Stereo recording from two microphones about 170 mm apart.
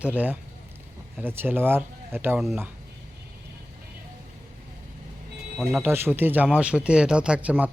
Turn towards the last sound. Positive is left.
turn(degrees=-10)  # may be behind; listen again after turning